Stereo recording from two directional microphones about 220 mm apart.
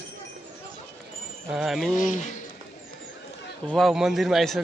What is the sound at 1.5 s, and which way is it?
Speech, centre (ahead or behind).